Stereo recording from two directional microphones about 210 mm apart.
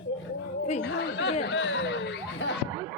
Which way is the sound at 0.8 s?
55° left (ahead or behind).